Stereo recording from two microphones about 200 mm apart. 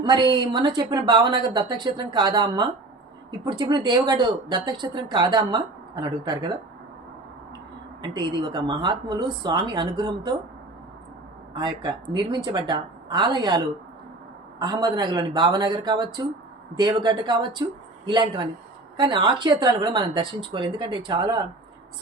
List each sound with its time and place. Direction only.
0.0 s speech: 25° right (ahead or behind)
8.0 s speech: 20° right (ahead or behind)
11.5 s speech: 20° right (ahead or behind)
14.6 s speech: 20° right (ahead or behind)